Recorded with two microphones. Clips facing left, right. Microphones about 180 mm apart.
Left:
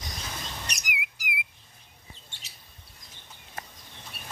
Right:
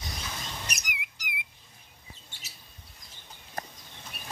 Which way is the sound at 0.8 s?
10° left (ahead or behind).